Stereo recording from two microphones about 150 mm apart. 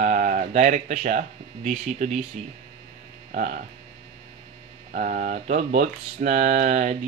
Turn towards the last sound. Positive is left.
turn(degrees=-55)  # may be behind; listen again after turning